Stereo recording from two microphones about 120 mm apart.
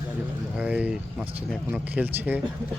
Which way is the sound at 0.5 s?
10° right (ahead or behind).